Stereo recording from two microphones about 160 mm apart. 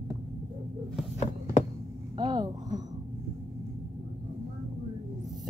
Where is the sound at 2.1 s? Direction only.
25° right (ahead or behind).